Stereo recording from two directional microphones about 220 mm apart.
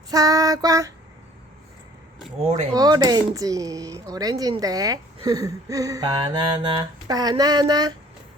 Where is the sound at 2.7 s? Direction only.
20° right (ahead or behind).